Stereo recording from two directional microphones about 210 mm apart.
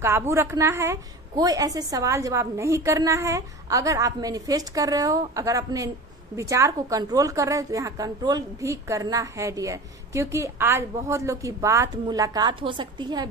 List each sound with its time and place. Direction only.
0.0 s a woman's voice: 10° right (ahead or behind)